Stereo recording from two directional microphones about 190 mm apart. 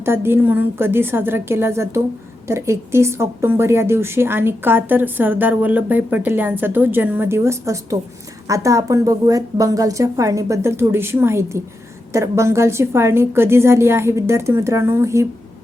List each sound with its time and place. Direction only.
0.0 s speech: 10° right (ahead or behind)